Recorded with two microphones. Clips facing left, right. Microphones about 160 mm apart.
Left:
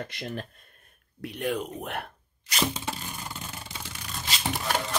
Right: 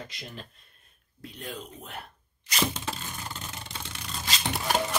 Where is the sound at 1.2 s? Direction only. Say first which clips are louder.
Left 10 dB; 70° left (ahead or behind).